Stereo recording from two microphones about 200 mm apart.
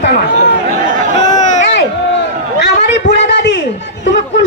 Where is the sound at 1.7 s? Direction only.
60° left (ahead or behind).